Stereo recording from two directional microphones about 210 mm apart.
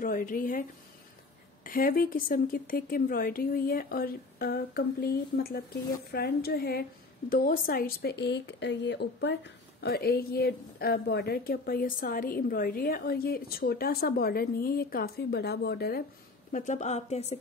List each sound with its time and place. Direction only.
0.0 s a woman's voice: 40° left (ahead or behind)
16.5 s a woman's voice: 35° left (ahead or behind)